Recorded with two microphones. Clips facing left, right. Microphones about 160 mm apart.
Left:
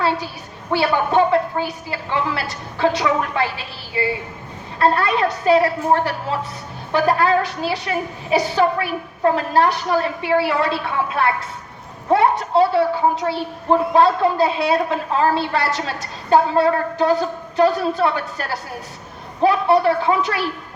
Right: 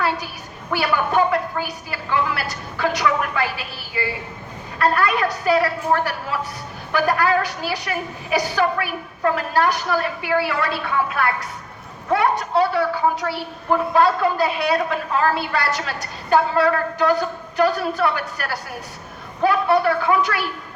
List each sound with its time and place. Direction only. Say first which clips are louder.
0.7 s a woman's voice: left 3 dB; 25° left (ahead or behind)